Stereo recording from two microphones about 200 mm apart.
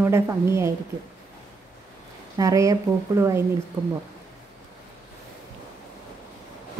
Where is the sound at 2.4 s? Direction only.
15° right (ahead or behind).